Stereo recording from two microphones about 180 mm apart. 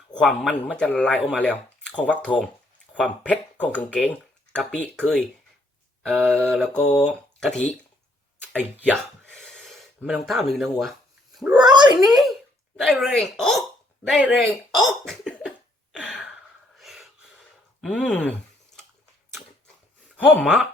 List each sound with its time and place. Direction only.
0.1 s speech: 5° left (ahead or behind)
8.5 s speech: 10° right (ahead or behind)
8.9 s gasp: 5° left (ahead or behind)
10.5 s speech: centre (ahead or behind)
11.7 s a sound: 25° right (ahead or behind)
11.9 s speech: centre (ahead or behind)
15.9 s a sound: centre (ahead or behind)
20.3 s speech: 5° left (ahead or behind)